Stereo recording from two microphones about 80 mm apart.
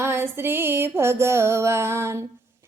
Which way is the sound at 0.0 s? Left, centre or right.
Right.